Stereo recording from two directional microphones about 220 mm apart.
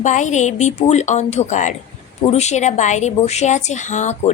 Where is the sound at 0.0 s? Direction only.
35° left (ahead or behind).